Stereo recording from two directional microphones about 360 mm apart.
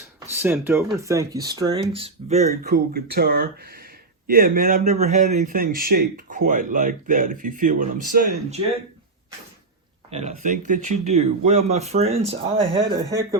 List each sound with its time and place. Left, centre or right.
0.3 s a man's voice: centre
10.1 s speech: centre